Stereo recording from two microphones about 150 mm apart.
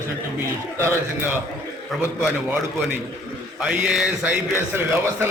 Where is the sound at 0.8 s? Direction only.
15° right (ahead or behind).